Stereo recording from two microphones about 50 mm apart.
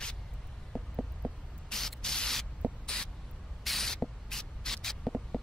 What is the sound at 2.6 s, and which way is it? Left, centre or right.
Spray, right.